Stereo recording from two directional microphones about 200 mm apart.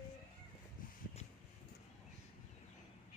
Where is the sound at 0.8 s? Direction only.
45° left (ahead or behind).